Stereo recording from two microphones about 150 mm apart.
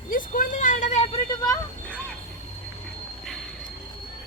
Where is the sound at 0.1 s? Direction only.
65° left (ahead or behind); by 1.2 s 45° left (ahead or behind).